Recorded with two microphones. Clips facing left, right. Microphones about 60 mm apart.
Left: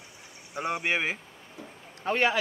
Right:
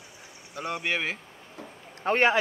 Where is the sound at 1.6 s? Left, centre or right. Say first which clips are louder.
Right 2 dB; right.